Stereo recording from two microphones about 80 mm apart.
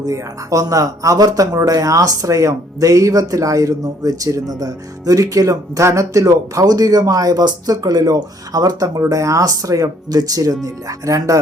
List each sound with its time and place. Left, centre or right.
0.0 s speech: right